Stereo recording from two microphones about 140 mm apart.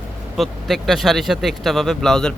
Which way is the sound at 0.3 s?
Centre (ahead or behind).